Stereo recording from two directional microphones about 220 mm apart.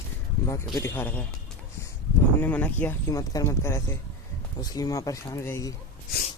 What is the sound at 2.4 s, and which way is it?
Speech, 5° left (ahead or behind).